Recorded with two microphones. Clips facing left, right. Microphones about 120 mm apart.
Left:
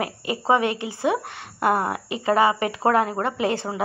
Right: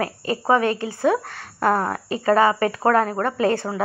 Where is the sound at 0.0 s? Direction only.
20° left (ahead or behind).